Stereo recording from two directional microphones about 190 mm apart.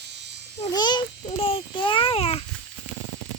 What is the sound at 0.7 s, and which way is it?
A child's voice, 25° left (ahead or behind).